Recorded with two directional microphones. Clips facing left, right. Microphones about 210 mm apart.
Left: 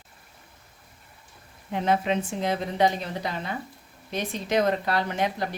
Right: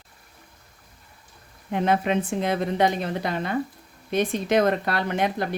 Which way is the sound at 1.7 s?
55° right (ahead or behind).